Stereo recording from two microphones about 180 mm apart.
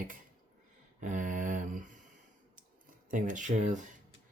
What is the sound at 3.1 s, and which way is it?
Speech, 45° right (ahead or behind).